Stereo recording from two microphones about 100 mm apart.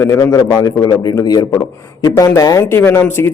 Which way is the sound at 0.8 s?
40° left (ahead or behind).